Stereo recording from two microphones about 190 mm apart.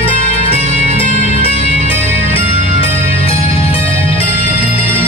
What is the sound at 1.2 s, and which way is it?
Music, 30° left (ahead or behind).